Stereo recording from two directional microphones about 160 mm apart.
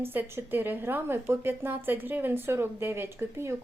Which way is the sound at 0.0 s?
15° right (ahead or behind).